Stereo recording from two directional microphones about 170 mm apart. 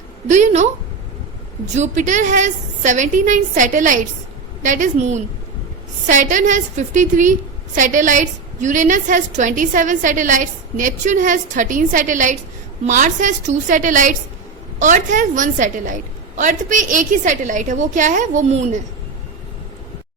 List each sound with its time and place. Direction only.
0.3 s a woman's voice: 45° right (ahead or behind)